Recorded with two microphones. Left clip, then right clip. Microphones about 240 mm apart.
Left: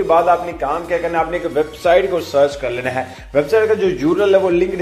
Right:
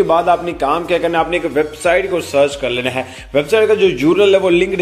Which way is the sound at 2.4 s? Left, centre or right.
Right.